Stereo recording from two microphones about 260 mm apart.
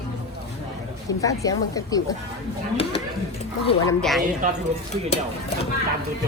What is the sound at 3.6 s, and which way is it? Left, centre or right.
Speech, left.